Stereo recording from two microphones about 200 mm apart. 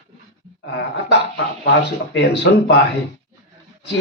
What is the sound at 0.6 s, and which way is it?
A man's voice, 60° left (ahead or behind).